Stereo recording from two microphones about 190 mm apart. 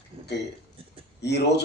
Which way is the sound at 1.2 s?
60° left (ahead or behind).